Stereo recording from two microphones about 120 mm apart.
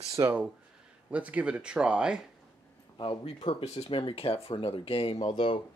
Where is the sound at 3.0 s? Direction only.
45° left (ahead or behind).